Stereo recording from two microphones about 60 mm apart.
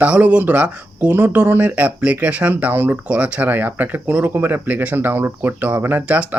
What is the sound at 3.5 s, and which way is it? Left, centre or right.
Speech, right.